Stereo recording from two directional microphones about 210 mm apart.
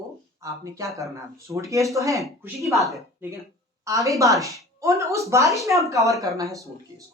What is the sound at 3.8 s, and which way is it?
A woman's voice, 15° right (ahead or behind).